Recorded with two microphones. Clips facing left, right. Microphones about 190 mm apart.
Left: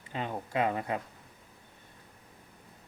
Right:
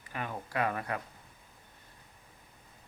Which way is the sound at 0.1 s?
20° left (ahead or behind).